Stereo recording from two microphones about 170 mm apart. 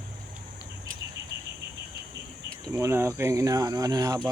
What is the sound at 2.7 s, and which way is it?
Speech, 15° right (ahead or behind).